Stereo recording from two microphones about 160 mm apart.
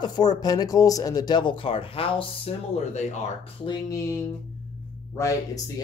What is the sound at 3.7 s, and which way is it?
Speech, 20° left (ahead or behind).